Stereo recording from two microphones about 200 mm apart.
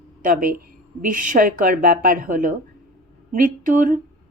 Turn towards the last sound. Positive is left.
turn(degrees=-40)  # may be behind; listen again after turning